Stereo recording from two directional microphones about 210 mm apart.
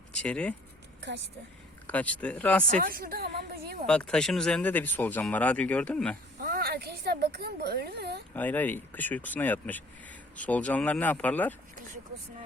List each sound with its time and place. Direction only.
0.2 s speech: 5° left (ahead or behind)
1.9 s speech: 5° left (ahead or behind)
2.8 s speech: 45° right (ahead or behind)
3.8 s speech: 5° left (ahead or behind)
6.4 s speech: 45° right (ahead or behind)
8.3 s speech: 10° left (ahead or behind)